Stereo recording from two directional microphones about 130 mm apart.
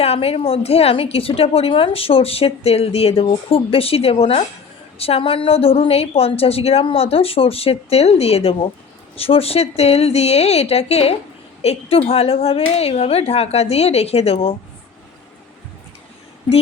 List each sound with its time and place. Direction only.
0.0 s a woman's voice: 50° left (ahead or behind)